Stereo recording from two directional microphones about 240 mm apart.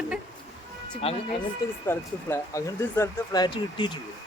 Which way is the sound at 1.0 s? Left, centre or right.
Left.